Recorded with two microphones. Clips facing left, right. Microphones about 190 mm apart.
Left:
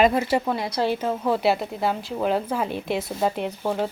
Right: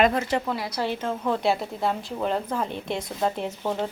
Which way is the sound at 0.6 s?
30° left (ahead or behind).